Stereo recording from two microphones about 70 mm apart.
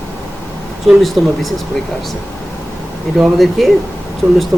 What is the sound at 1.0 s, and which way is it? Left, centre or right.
Speech, centre.